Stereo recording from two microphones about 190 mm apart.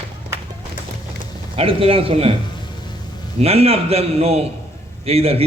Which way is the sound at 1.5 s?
30° right (ahead or behind).